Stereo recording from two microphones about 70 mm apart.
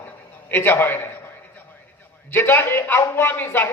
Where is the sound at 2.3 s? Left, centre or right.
Left.